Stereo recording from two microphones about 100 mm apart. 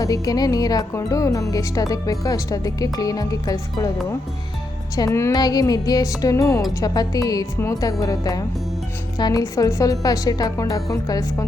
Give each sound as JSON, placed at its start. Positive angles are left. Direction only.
{"t": 0.0, "sound": "speech", "side_deg": 40}
{"t": 4.9, "sound": "speech", "side_deg": 30}